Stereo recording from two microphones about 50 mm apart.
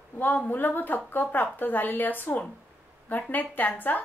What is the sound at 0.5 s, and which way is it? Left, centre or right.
A woman's voice, left.